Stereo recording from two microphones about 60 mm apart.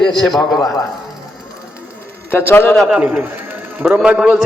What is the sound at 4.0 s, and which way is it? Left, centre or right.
Speech, centre.